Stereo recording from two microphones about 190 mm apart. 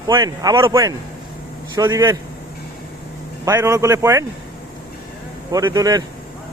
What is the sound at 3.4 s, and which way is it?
Speech, 15° right (ahead or behind).